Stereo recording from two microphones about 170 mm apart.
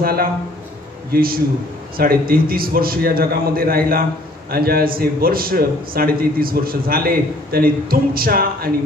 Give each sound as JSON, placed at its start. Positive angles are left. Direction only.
{"t": 0.0, "sound": "a man's voice", "side_deg": -60}